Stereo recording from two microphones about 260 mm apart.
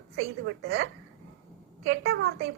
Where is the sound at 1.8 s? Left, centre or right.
Right.